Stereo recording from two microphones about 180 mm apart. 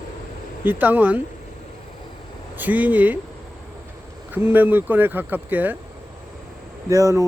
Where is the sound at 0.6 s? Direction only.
10° right (ahead or behind).